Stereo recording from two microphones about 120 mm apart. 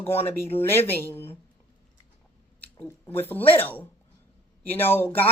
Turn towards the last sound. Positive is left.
turn(degrees=15)  # may be behind; listen again after turning